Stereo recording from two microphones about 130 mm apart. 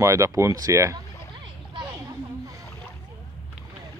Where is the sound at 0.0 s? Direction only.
25° right (ahead or behind).